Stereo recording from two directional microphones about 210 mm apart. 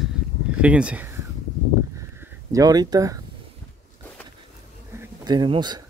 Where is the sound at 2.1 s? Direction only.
15° right (ahead or behind).